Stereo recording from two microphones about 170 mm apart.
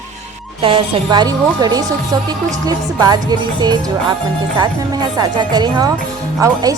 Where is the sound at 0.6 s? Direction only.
30° right (ahead or behind).